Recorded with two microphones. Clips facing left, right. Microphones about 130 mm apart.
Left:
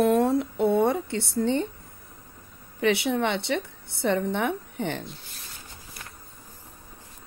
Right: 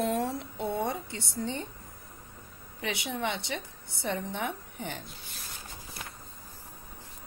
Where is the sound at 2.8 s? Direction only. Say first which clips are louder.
Left 10 dB; 65° left (ahead or behind).